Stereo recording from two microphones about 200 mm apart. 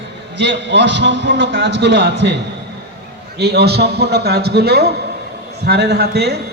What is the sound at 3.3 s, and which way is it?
A man's voice, 55° right (ahead or behind).